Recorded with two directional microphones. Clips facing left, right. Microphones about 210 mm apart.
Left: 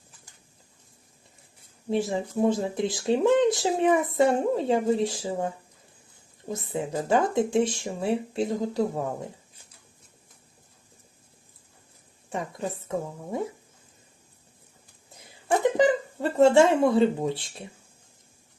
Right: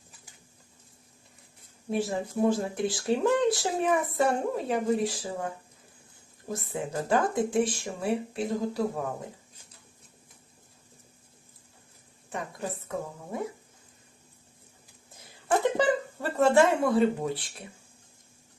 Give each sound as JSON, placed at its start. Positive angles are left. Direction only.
{"t": 1.9, "sound": "speech", "side_deg": 20}
{"t": 6.5, "sound": "speech", "side_deg": 20}
{"t": 15.6, "sound": "speech", "side_deg": 20}